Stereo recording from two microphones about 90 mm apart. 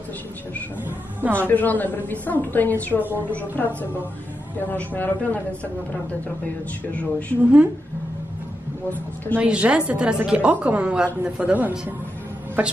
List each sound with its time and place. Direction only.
0.8 s a woman's voice: 20° right (ahead or behind)
1.5 s a woman's voice: 20° left (ahead or behind)
6.9 s speech: 15° left (ahead or behind)
9.3 s a woman's voice: 15° right (ahead or behind)